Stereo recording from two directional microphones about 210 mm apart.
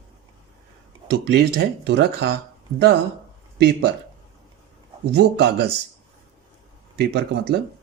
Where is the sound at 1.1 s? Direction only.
50° right (ahead or behind).